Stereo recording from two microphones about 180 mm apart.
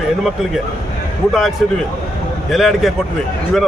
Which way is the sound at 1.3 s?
Centre (ahead or behind).